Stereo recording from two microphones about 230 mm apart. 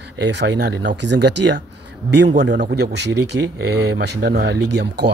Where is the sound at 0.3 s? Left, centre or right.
Right.